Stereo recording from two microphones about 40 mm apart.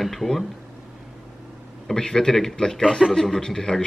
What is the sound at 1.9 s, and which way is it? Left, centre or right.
A man's voice, centre.